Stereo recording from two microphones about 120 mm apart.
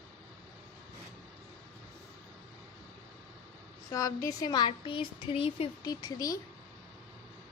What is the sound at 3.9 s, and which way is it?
A woman's voice, 25° left (ahead or behind).